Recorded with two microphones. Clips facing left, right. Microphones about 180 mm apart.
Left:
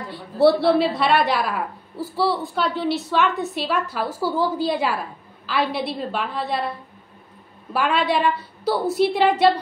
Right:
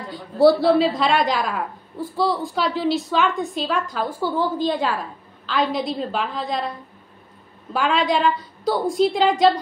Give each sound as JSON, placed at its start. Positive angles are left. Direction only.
{"t": 0.1, "sound": "a woman's voice", "side_deg": 0}
{"t": 0.6, "sound": "a man's voice", "side_deg": 65}
{"t": 0.9, "sound": "a woman's voice", "side_deg": 5}
{"t": 7.7, "sound": "a woman's voice", "side_deg": 5}